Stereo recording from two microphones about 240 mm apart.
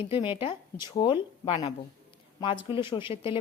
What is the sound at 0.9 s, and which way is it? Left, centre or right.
A woman's voice, centre.